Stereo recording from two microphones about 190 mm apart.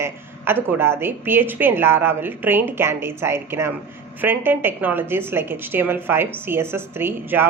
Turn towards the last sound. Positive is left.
turn(degrees=-10)  # may be behind; listen again after turning